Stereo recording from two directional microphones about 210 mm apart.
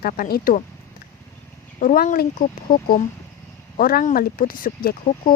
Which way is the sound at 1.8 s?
40° left (ahead or behind).